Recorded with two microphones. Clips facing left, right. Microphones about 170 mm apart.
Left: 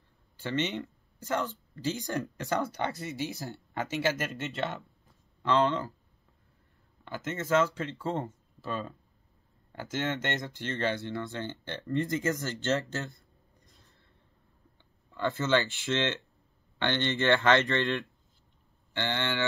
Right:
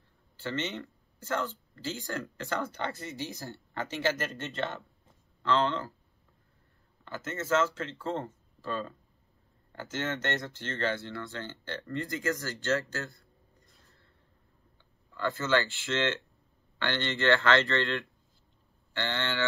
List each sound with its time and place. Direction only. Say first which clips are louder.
0.4 s speech: left 3 dB; 15° left (ahead or behind)
7.1 s speech: left 1 dB; 15° left (ahead or behind)
15.1 s speech: left 1 dB; 20° left (ahead or behind)